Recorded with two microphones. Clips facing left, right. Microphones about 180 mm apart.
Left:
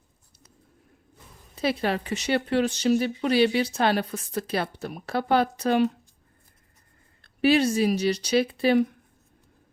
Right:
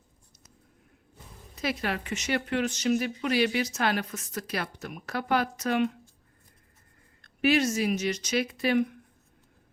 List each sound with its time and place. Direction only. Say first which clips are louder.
1.5 s speech: left 5 dB; 30° left (ahead or behind)
7.2 s speech: left 4 dB; 30° left (ahead or behind)